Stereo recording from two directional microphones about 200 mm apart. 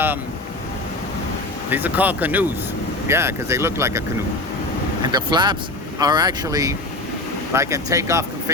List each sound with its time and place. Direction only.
1.7 s speech: 10° right (ahead or behind)
5.1 s speech: 20° right (ahead or behind)